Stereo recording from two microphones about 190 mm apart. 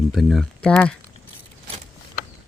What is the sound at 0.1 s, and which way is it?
Speech, centre (ahead or behind).